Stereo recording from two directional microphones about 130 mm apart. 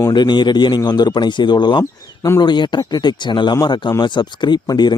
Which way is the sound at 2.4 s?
35° left (ahead or behind).